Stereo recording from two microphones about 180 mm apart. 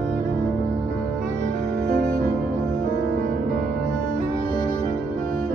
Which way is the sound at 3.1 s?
50° right (ahead or behind).